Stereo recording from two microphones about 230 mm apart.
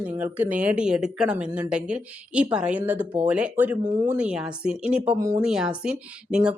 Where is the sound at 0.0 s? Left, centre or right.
Centre.